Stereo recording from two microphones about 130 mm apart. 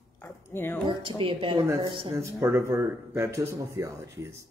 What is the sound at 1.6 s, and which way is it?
Speech, 25° right (ahead or behind).